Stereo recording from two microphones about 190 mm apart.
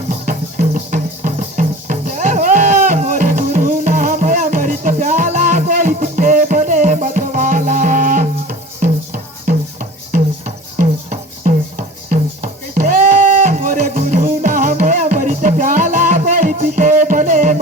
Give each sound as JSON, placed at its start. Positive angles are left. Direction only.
{"t": 0.1, "sound": "music", "side_deg": -45}